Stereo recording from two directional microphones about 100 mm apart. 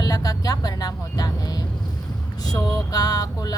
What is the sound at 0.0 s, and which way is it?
Vehicle, 40° left (ahead or behind).